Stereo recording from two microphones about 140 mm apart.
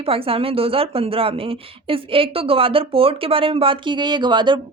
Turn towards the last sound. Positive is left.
turn(degrees=-30)  # may be behind; listen again after turning